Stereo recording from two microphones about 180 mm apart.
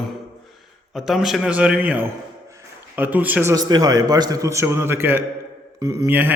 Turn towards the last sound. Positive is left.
turn(degrees=-10)  # may be behind; listen again after turning